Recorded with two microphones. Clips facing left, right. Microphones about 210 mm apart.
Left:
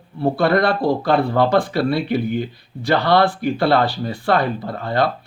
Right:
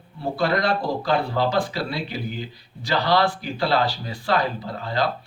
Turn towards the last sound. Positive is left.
turn(degrees=55)  # may be behind; listen again after turning